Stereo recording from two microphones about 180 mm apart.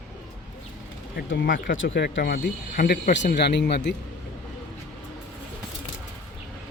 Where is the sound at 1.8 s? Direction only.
80° left; by 3.1 s 55° left (ahead or behind).